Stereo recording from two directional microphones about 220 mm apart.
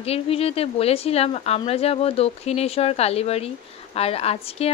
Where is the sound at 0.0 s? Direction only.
25° left (ahead or behind).